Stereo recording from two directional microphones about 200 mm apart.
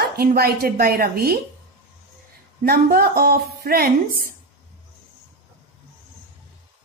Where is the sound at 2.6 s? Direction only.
50° right (ahead or behind).